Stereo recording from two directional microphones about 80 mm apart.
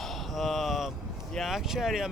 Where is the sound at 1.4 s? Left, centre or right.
Centre.